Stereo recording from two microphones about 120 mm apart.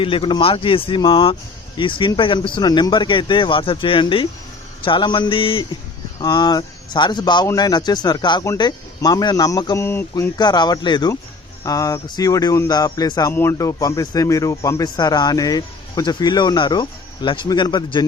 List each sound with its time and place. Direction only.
0.0 s speech: 45° left (ahead or behind)
6.2 s a man's voice: 35° left (ahead or behind)
10.3 s a man's voice: 35° left (ahead or behind)